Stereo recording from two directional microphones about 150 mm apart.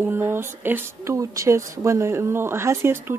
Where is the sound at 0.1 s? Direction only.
15° right (ahead or behind).